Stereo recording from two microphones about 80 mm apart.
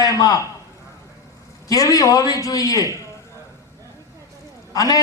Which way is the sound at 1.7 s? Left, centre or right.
Left.